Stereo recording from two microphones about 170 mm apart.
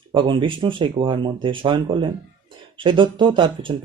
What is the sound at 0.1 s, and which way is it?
Speech, 30° right (ahead or behind).